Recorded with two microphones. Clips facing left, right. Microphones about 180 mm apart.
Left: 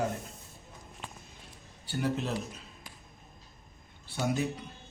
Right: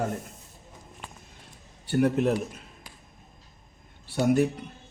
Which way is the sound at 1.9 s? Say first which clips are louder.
Right 9 dB; 60° right (ahead or behind).